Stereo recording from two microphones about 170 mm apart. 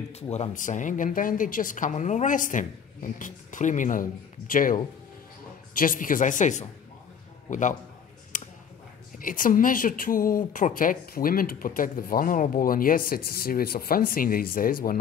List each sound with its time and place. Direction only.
0.1 s a woman's voice: 40° left (ahead or behind)
5.8 s a woman's voice: 55° left (ahead or behind)
8.3 s a sound: 50° left (ahead or behind)
9.2 s speech: 55° left (ahead or behind)